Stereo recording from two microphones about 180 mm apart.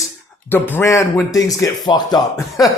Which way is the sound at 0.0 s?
10° left (ahead or behind).